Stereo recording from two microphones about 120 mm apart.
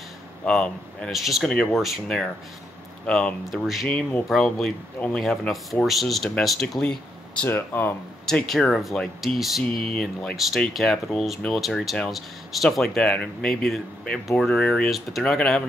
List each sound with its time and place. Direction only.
0.5 s speech: 5° left (ahead or behind)
7.4 s speech: 15° left (ahead or behind)
8.3 s speech: 5° left (ahead or behind)